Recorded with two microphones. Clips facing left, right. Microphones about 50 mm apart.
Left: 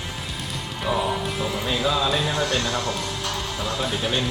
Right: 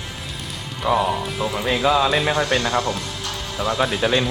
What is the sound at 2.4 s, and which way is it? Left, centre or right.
Speech, right.